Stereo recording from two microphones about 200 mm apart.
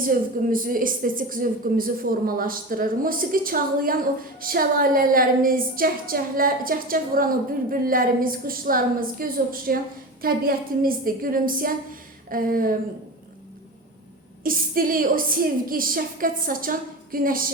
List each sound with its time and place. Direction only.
0.0 s a woman's voice: 45° right (ahead or behind)
14.4 s a woman's voice: 45° right (ahead or behind)